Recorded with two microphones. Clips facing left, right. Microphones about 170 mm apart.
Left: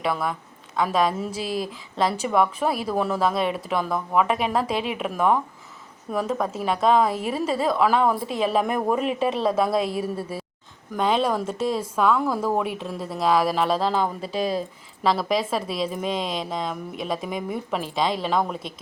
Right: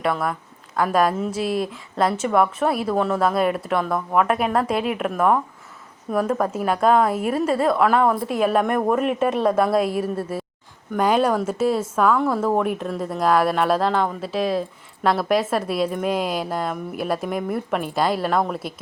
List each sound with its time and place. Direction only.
0.0 s a woman's voice: centre (ahead or behind)
6.6 s a woman's voice: 5° right (ahead or behind)
10.0 s a woman's voice: 55° right (ahead or behind)
10.9 s a woman's voice: 5° right (ahead or behind)